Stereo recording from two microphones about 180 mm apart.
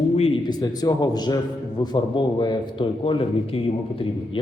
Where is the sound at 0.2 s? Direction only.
25° left (ahead or behind).